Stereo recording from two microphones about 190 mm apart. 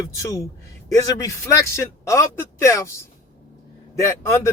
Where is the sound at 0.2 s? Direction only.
15° left (ahead or behind).